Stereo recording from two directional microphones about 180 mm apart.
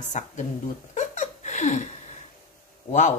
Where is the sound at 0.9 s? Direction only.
40° left (ahead or behind).